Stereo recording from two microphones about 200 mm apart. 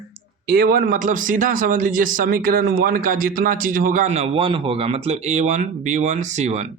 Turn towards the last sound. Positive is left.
turn(degrees=-35)  # may be behind; listen again after turning